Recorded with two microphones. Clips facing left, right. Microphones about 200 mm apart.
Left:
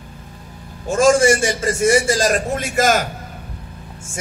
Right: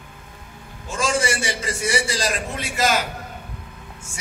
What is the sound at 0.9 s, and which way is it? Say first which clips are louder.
A man's voice: left 10 dB; 45° left (ahead or behind).